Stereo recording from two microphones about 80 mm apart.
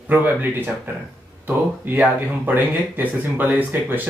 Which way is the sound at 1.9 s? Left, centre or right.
Right.